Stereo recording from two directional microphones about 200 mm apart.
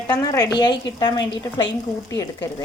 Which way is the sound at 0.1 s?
20° left (ahead or behind).